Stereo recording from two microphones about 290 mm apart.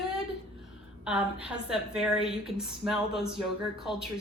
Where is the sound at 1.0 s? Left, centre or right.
Centre.